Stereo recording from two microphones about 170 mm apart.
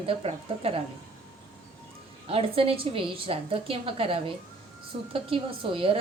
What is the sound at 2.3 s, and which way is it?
A woman's voice, 35° right (ahead or behind).